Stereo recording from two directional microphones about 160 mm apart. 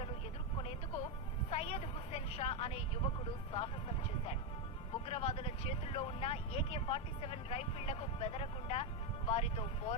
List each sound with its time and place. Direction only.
1.5 s vehicle: 40° left (ahead or behind)
3.5 s speech: 35° left (ahead or behind)